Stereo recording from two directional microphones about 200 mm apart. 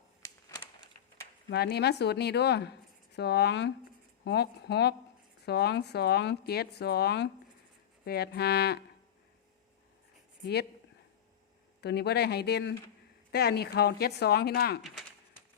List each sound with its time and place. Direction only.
1.5 s speech: 55° left (ahead or behind)
10.4 s speech: 55° left (ahead or behind)
11.8 s speech: 55° left (ahead or behind)
14.8 s speech: centre (ahead or behind)